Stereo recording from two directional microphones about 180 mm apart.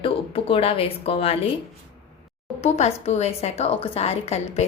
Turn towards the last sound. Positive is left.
turn(degrees=35)  # may be behind; listen again after turning